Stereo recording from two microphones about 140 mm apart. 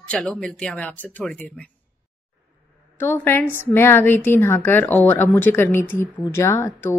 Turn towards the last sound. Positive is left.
turn(degrees=20)  # may be behind; listen again after turning